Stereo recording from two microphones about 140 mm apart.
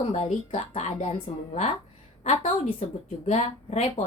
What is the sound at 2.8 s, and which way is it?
Speech, 60° left (ahead or behind).